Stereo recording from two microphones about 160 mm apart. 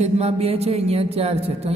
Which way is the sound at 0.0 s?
40° right (ahead or behind).